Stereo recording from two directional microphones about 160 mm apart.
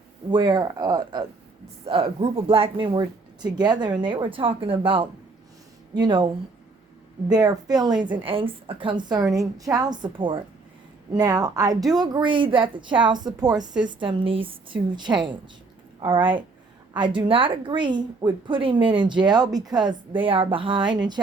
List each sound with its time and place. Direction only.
0.3 s a woman's voice: 30° right (ahead or behind)
1.9 s a woman's voice: 35° right (ahead or behind)
7.3 s a woman's voice: 25° right (ahead or behind)